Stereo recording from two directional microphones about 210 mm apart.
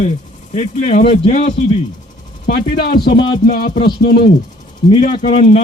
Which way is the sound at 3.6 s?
40° left (ahead or behind).